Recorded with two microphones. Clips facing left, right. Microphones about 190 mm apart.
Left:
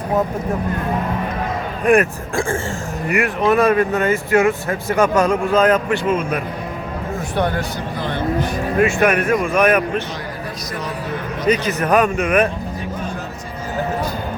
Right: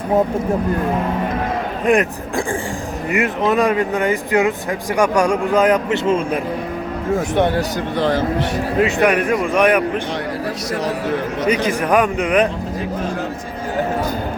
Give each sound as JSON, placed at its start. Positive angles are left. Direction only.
{"t": 1.8, "sound": "speech", "side_deg": -20}
{"t": 6.1, "sound": "a man's voice", "side_deg": -30}
{"t": 7.9, "sound": "speech", "side_deg": -90}
{"t": 8.8, "sound": "speech", "side_deg": -20}
{"t": 11.4, "sound": "speech", "side_deg": -15}